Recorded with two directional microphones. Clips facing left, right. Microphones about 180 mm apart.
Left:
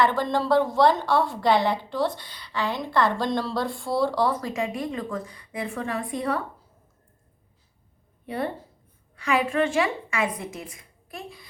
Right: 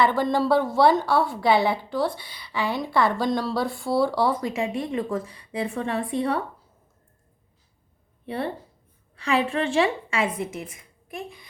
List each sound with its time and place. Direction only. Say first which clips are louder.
0.0 s a woman's voice: right 2 dB; 10° right (ahead or behind)
4.5 s a woman's voice: right 2 dB; 25° right (ahead or behind)
9.1 s a woman's voice: even; 30° right (ahead or behind)